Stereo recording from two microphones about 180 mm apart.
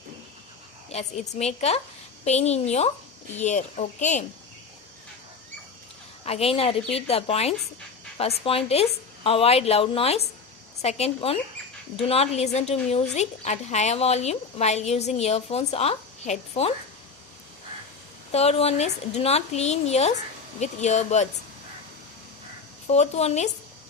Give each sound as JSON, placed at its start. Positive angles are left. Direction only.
{"t": 0.9, "sound": "a woman's voice", "side_deg": 40}
{"t": 6.2, "sound": "a woman's voice", "side_deg": 35}
{"t": 18.3, "sound": "a woman's voice", "side_deg": 35}
{"t": 22.9, "sound": "a woman's voice", "side_deg": 35}